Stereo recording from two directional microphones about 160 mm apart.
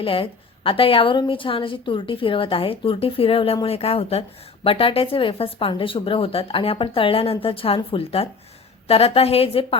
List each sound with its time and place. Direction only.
0.0 s a woman's voice: 35° left (ahead or behind)